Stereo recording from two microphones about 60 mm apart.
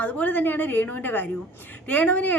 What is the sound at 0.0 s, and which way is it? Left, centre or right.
A woman's voice, left.